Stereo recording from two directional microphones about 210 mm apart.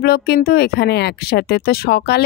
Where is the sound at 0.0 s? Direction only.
45° left (ahead or behind).